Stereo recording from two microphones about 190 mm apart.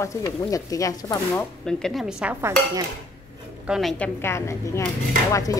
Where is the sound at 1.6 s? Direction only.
Centre (ahead or behind).